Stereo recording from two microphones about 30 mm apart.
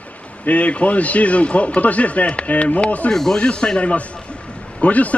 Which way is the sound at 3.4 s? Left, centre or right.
Left.